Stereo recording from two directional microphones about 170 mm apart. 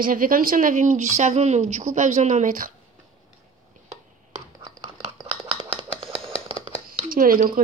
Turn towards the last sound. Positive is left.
turn(degrees=-55)  # may be behind; listen again after turning